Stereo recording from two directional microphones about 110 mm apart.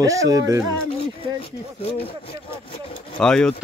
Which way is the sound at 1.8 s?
60° left (ahead or behind).